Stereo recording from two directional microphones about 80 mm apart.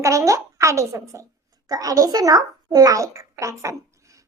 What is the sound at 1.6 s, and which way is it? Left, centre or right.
A child's voice, right.